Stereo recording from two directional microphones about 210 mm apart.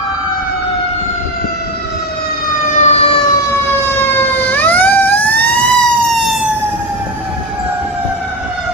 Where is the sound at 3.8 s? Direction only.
10° left (ahead or behind).